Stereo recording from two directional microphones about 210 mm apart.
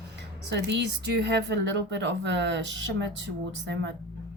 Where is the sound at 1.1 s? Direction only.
50° right (ahead or behind).